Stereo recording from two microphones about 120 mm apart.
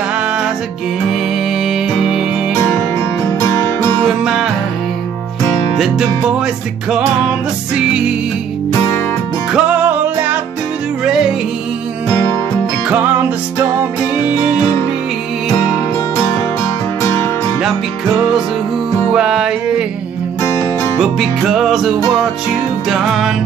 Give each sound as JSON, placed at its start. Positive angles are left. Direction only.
{"t": 1.6, "sound": "music", "side_deg": 0}
{"t": 3.3, "sound": "music", "side_deg": 25}
{"t": 4.0, "sound": "music", "side_deg": -5}
{"t": 5.8, "sound": "music", "side_deg": -5}
{"t": 9.5, "sound": "music", "side_deg": -10}
{"t": 12.9, "sound": "music", "side_deg": -15}
{"t": 14.2, "sound": "music", "side_deg": -10}
{"t": 17.0, "sound": "music", "side_deg": 20}
{"t": 19.1, "sound": "music", "side_deg": -5}
{"t": 20.4, "sound": "music", "side_deg": 25}
{"t": 21.0, "sound": "music", "side_deg": 0}